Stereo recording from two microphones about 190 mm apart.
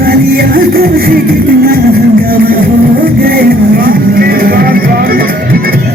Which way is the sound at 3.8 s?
50° right (ahead or behind).